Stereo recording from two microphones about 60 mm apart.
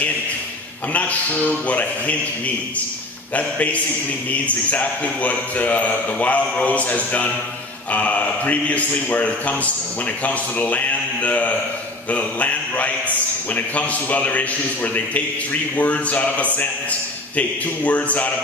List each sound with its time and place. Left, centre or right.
0.9 s a man's voice: left